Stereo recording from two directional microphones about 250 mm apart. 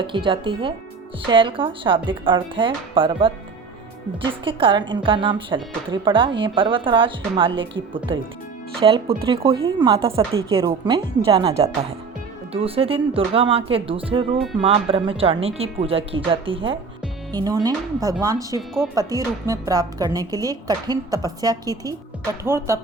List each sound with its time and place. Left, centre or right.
0.0 s a woman's voice: centre